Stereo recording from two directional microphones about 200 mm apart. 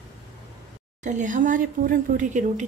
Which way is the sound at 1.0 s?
40° right (ahead or behind).